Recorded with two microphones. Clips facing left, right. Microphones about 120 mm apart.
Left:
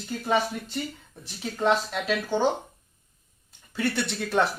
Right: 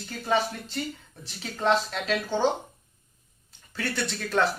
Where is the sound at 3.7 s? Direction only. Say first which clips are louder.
Left 3 dB; 20° left (ahead or behind).